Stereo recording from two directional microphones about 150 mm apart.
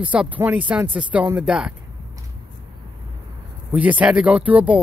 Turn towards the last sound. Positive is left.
turn(degrees=-10)  # may be behind; listen again after turning